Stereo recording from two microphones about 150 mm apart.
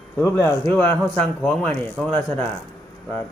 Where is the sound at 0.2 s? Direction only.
15° left (ahead or behind).